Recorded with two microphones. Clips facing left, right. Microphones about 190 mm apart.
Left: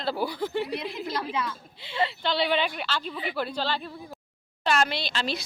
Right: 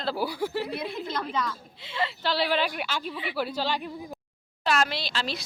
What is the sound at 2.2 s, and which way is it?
A woman's voice, 5° right (ahead or behind).